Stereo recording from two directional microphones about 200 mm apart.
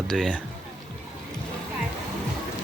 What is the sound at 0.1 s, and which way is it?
Speech, 5° left (ahead or behind).